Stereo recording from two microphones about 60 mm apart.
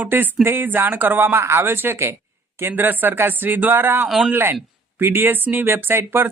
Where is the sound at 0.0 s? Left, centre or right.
Right.